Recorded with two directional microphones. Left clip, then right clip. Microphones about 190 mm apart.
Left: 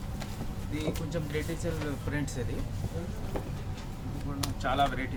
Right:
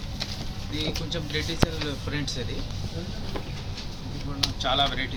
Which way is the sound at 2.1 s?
Centre (ahead or behind).